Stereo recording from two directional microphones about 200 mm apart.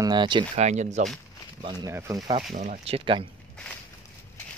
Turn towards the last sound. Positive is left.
turn(degrees=-25)  # may be behind; listen again after turning